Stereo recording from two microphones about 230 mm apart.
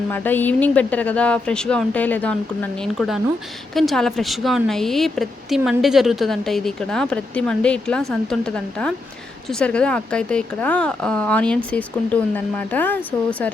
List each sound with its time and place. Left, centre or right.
0.1 s a woman's voice: centre